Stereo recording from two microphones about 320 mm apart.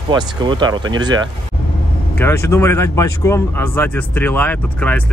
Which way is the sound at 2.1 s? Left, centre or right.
Centre.